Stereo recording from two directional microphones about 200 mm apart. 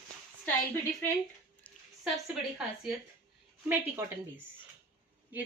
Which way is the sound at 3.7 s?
10° right (ahead or behind).